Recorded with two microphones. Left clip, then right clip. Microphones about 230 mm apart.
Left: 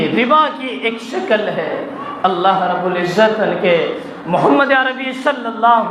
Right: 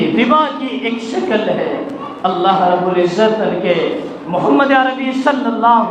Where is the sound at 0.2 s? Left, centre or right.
Left.